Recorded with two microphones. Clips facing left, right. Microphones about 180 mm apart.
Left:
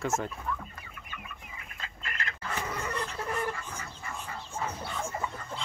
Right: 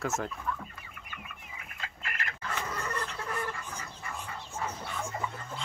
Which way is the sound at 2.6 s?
10° left (ahead or behind).